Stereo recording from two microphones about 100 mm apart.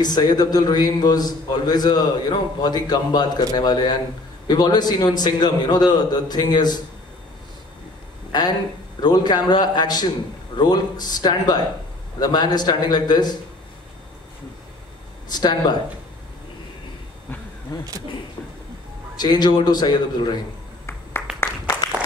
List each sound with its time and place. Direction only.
0.0 s a man's voice: 45° left (ahead or behind)
8.3 s a man's voice: 45° left (ahead or behind)
15.2 s a man's voice: 45° left (ahead or behind)
17.7 s speech: 40° left (ahead or behind)
19.1 s a man's voice: 45° left (ahead or behind)